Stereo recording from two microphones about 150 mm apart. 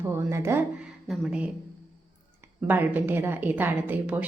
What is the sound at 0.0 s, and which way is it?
Speech, 15° right (ahead or behind).